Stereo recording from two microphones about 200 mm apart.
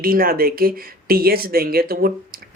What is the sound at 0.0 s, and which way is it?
Speech, 45° right (ahead or behind).